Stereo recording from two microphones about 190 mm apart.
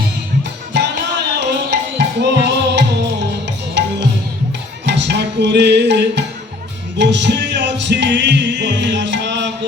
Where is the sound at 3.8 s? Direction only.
65° right (ahead or behind).